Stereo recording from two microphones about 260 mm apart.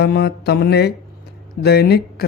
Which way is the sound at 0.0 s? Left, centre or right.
Left.